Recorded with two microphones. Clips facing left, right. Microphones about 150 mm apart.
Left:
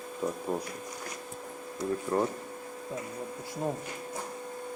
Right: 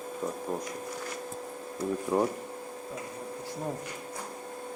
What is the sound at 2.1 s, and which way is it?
Speech, 5° right (ahead or behind).